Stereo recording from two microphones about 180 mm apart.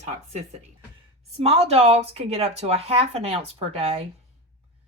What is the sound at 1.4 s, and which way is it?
Speech, 35° right (ahead or behind).